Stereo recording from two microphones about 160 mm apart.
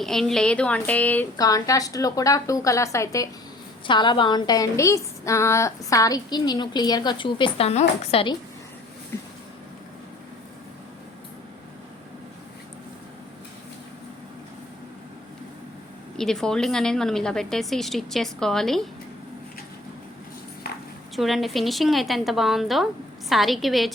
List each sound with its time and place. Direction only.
0.0 s a woman's voice: centre (ahead or behind)
1.4 s a woman's voice: 20° left (ahead or behind)
9.1 s a sound: 15° left (ahead or behind)
16.1 s a woman's voice: 5° left (ahead or behind)
20.7 s a sound: 75° left (ahead or behind)
21.2 s a woman's voice: centre (ahead or behind)